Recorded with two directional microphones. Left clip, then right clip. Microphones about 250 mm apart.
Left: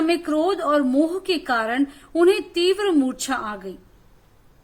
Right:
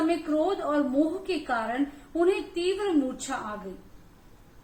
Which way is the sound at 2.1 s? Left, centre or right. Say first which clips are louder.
Left 7 dB; left.